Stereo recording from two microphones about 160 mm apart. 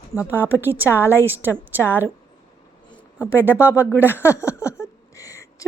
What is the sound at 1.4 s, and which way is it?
Speech, 15° right (ahead or behind).